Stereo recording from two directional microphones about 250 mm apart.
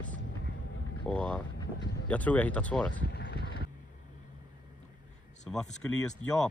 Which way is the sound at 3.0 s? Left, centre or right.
Left.